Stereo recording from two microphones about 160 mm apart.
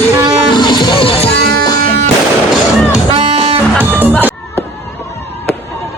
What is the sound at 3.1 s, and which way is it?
Music, 35° right (ahead or behind).